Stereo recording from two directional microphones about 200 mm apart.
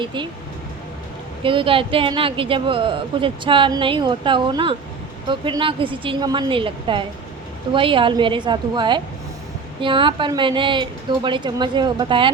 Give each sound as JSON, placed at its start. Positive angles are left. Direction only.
{"t": 0.0, "sound": "speech", "side_deg": -25}
{"t": 1.5, "sound": "speech", "side_deg": -25}